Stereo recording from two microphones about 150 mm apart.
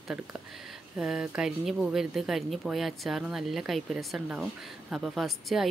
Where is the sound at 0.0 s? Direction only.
5° right (ahead or behind).